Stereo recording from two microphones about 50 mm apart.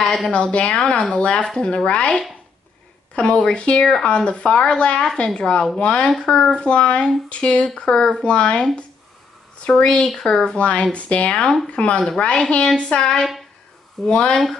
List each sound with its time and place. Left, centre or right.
0.0 s speech: centre
0.3 s speech: left
3.2 s speech: left
3.8 s speech: centre
4.1 s speech: left
9.7 s speech: centre